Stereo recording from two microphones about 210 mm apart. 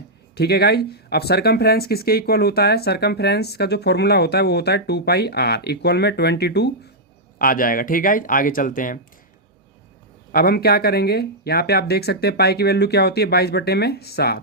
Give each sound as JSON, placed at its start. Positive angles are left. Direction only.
{"t": 0.3, "sound": "speech", "side_deg": 50}
{"t": 7.3, "sound": "speech", "side_deg": 40}
{"t": 10.3, "sound": "speech", "side_deg": 45}